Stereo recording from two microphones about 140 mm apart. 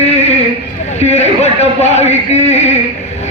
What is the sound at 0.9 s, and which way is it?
A man's voice, 50° left (ahead or behind).